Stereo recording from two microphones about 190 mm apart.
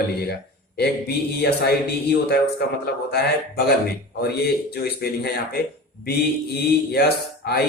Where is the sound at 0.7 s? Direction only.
55° left (ahead or behind).